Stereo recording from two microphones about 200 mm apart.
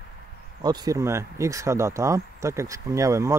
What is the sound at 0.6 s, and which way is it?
Speech, 20° right (ahead or behind).